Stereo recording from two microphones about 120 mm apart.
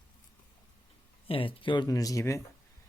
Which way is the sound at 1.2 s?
50° left (ahead or behind).